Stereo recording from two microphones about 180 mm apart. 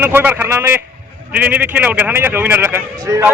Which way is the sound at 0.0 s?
10° right (ahead or behind).